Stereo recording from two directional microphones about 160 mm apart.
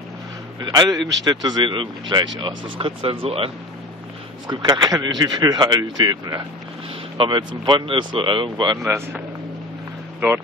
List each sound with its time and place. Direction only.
0.7 s speech: 25° right (ahead or behind)
4.5 s speech: 25° right (ahead or behind)
8.8 s speech: 15° right (ahead or behind)